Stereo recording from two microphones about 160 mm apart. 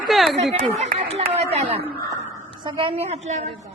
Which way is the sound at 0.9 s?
40° right (ahead or behind).